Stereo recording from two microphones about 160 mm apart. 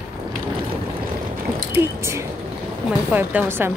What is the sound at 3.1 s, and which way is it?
Speech, 10° right (ahead or behind).